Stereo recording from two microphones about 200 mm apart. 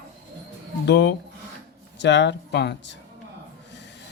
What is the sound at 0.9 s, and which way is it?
Speech, 60° left (ahead or behind).